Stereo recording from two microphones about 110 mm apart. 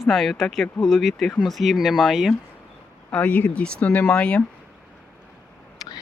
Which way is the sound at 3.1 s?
15° left (ahead or behind).